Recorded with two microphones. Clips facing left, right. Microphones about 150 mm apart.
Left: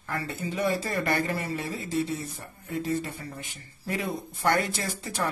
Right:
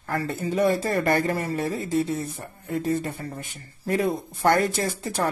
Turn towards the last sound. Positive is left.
turn(degrees=-45)  # may be behind; listen again after turning